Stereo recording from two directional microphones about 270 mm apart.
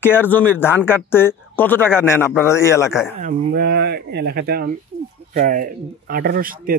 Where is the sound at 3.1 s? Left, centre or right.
Right.